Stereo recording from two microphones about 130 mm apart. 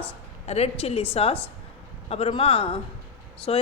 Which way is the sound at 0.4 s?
55° left (ahead or behind).